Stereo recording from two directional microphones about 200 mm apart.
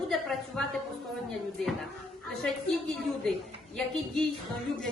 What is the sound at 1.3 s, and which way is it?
A woman's voice, centre (ahead or behind).